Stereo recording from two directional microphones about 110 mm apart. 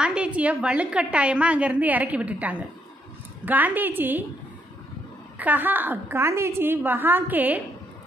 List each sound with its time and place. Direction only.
0.0 s a woman's voice: 10° right (ahead or behind)
5.4 s a woman's voice: 15° right (ahead or behind)